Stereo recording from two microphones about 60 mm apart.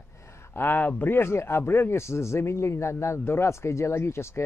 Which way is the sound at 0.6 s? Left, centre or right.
Left.